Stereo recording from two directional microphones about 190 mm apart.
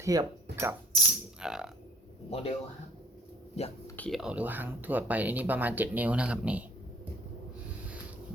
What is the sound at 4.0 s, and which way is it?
Speech, centre (ahead or behind).